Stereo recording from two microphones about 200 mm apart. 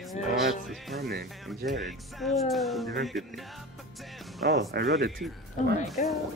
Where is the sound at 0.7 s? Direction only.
Centre (ahead or behind).